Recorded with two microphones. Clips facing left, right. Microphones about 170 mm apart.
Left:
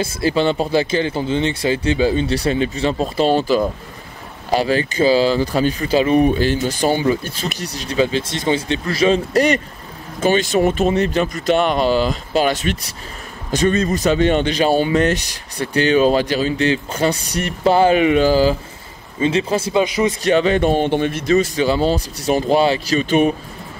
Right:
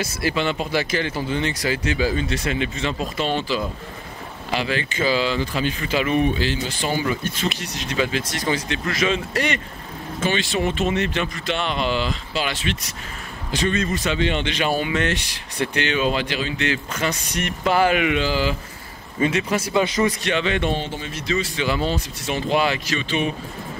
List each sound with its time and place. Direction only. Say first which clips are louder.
0.0 s speech: left 6 dB; 30° left (ahead or behind)
7.0 s speech: left 5 dB; 30° left (ahead or behind)
19.1 s speech: left 3 dB; 30° left (ahead or behind)
19.8 s a man's voice: left 2 dB; 15° left (ahead or behind)
20.2 s speech: left 7 dB; 40° left (ahead or behind)
20.9 s speech: left 10 dB; 55° left (ahead or behind)
21.6 s speech: left 6 dB; 35° left (ahead or behind)